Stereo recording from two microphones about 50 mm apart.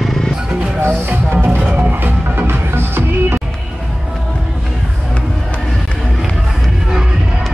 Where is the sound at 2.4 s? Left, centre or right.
Right.